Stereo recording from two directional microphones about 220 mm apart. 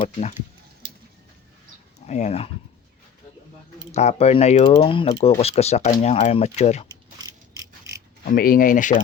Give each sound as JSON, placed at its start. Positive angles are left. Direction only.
{"t": 0.0, "sound": "speech", "side_deg": 30}
{"t": 2.0, "sound": "speech", "side_deg": 30}
{"t": 3.9, "sound": "speech", "side_deg": 30}
{"t": 7.2, "sound": "mechanisms", "side_deg": -15}
{"t": 8.2, "sound": "speech", "side_deg": 40}